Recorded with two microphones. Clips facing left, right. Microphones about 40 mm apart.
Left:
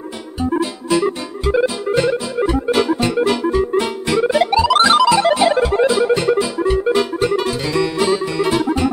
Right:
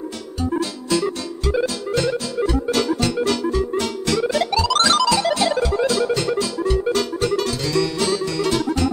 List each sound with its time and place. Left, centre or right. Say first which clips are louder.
0.4 s music: left 4 dB; left